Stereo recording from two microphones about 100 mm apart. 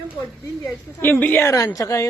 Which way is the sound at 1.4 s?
35° left (ahead or behind).